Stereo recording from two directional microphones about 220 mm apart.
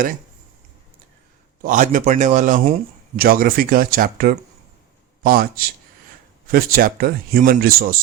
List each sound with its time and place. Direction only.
1.6 s a man's voice: 35° right (ahead or behind)